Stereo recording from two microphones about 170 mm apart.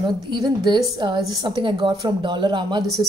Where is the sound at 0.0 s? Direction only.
25° right (ahead or behind).